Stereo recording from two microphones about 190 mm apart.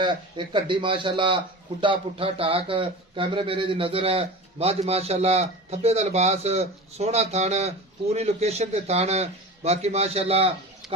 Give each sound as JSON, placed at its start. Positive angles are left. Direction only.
{"t": 0.0, "sound": "a man's voice", "side_deg": -25}